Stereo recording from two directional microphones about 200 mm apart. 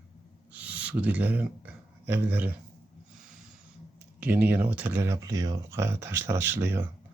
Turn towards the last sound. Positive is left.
turn(degrees=-10)  # may be behind; listen again after turning